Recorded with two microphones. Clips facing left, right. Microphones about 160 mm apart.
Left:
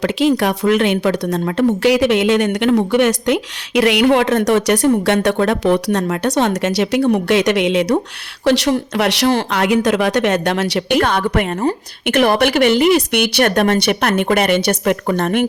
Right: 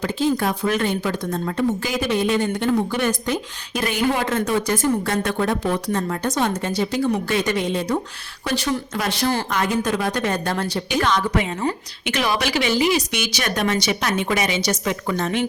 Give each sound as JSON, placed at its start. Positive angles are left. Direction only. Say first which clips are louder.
{"t": 0.0, "sound": "a woman's voice", "louder": "left 6 dB", "side_deg": 75}